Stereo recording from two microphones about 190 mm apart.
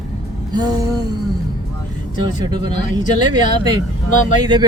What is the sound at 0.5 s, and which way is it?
Speech, 20° right (ahead or behind).